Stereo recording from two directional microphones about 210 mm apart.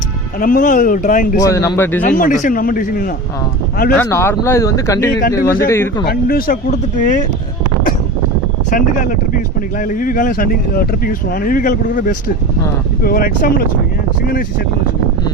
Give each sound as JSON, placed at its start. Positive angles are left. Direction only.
{"t": 0.3, "sound": "speech", "side_deg": 40}
{"t": 1.4, "sound": "speech", "side_deg": 15}
{"t": 2.0, "sound": "speech", "side_deg": 40}
{"t": 3.9, "sound": "speech", "side_deg": 10}
{"t": 6.1, "sound": "speech", "side_deg": 45}
{"t": 8.7, "sound": "speech", "side_deg": 40}